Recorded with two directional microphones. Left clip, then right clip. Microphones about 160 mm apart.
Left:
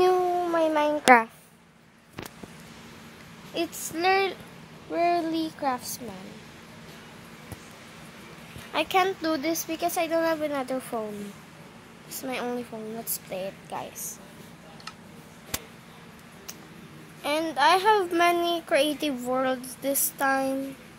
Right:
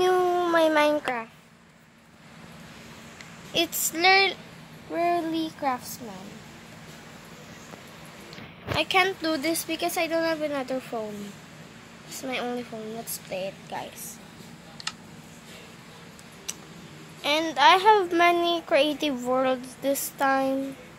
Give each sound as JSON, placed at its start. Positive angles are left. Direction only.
{"t": 0.0, "sound": "dog", "side_deg": 0}
{"t": 3.5, "sound": "a child's voice", "side_deg": 0}
{"t": 8.7, "sound": "a woman's voice", "side_deg": 10}
{"t": 12.2, "sound": "a child's voice", "side_deg": 5}
{"t": 14.9, "sound": "a sound", "side_deg": -20}
{"t": 17.2, "sound": "a child's voice", "side_deg": 5}